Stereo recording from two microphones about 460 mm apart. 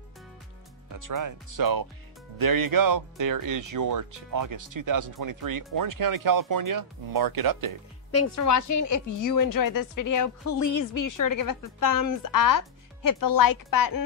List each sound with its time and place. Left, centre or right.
0.9 s speech: right
8.1 s a woman's voice: left